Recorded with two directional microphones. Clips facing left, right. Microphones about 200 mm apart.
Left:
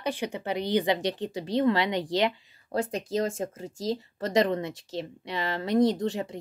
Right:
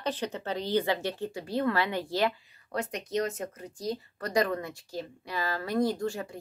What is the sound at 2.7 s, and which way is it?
Speech, 30° left (ahead or behind).